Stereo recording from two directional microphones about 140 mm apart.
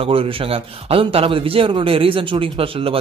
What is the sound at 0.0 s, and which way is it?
A man's voice, 40° right (ahead or behind).